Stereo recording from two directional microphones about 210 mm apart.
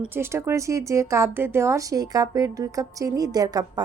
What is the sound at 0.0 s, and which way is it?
Speech, 10° right (ahead or behind).